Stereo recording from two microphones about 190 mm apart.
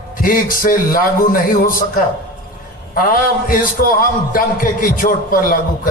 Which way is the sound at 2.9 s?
50° left (ahead or behind).